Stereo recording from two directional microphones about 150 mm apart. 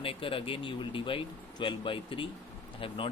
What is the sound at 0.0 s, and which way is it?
Speech, 35° left (ahead or behind).